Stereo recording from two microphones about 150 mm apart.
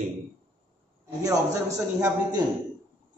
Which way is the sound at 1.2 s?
25° right (ahead or behind).